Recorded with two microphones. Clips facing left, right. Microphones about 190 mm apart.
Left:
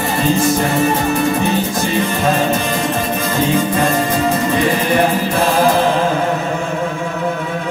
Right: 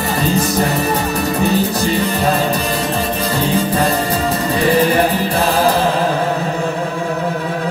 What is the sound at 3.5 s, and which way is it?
Music, 35° right (ahead or behind).